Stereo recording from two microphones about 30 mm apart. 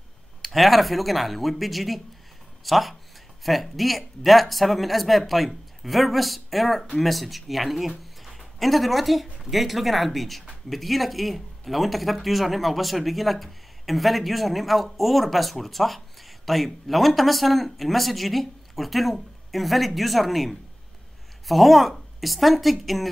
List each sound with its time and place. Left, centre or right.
0.4 s speech: centre